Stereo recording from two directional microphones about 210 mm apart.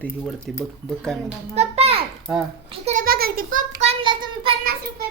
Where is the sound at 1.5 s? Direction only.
30° right (ahead or behind).